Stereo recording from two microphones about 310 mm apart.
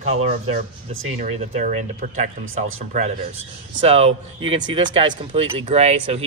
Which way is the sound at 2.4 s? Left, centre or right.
Right.